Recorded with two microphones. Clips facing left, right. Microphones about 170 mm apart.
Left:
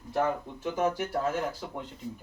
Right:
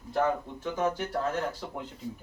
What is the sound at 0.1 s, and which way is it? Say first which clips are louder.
Speech: right 1 dB; 5° left (ahead or behind).